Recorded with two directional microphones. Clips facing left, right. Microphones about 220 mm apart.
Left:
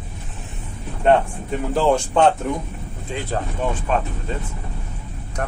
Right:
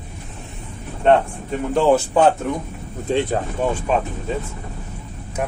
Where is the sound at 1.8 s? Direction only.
5° right (ahead or behind).